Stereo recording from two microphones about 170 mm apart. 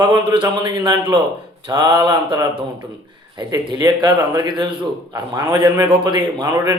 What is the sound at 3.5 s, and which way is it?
A man's voice, 25° right (ahead or behind).